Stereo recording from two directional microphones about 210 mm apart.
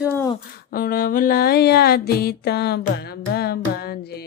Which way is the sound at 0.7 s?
45° left (ahead or behind).